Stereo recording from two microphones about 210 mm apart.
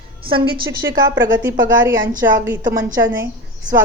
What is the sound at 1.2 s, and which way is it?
A woman's voice, 10° right (ahead or behind).